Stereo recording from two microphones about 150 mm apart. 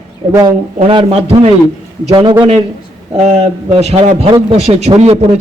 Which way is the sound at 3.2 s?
45° right (ahead or behind).